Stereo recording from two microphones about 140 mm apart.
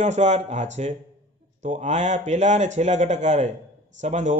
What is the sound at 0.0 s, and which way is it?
A man's voice, 55° right (ahead or behind).